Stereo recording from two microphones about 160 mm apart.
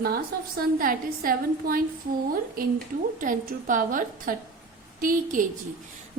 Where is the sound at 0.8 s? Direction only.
60° right (ahead or behind).